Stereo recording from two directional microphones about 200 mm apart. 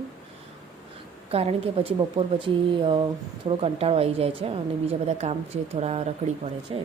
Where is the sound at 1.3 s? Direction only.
30° right (ahead or behind).